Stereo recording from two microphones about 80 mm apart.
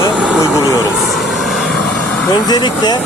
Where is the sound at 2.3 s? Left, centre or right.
Left.